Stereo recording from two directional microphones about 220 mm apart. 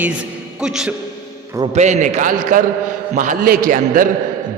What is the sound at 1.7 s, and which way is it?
A man's voice, 30° right (ahead or behind).